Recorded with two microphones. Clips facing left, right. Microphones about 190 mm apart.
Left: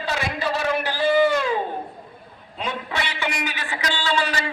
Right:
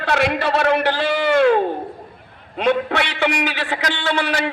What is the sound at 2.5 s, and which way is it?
A man's voice, 65° right (ahead or behind).